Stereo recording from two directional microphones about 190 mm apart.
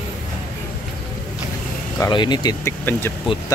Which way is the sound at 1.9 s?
20° left (ahead or behind).